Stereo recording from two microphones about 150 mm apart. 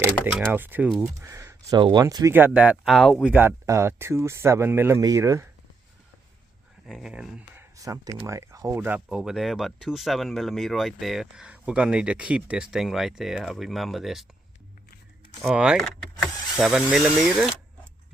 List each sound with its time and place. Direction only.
0.0 s speech: 10° right (ahead or behind)
0.9 s speech: centre (ahead or behind)
1.2 s speech: 20° right (ahead or behind); by 3.3 s centre (ahead or behind)
3.3 s speech: 15° right (ahead or behind)
6.8 s speech: centre (ahead or behind)
9.0 s speech: 5° right (ahead or behind)
15.4 s speech: 5° right (ahead or behind)